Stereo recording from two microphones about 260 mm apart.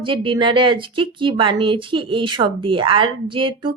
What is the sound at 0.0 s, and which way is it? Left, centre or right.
Speech, centre.